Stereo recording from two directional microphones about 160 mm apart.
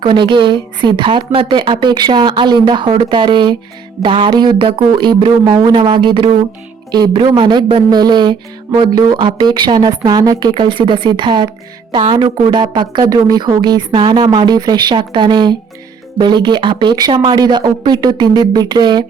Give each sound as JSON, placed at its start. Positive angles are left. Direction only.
{"t": 0.0, "sound": "speech", "side_deg": -30}